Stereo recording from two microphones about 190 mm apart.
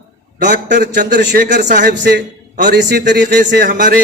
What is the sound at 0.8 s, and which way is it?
A man's voice, 55° right (ahead or behind).